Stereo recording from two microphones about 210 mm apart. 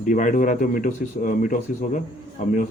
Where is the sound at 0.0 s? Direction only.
40° left (ahead or behind).